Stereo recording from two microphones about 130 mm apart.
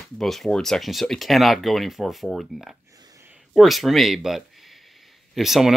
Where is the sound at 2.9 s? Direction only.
25° right (ahead or behind).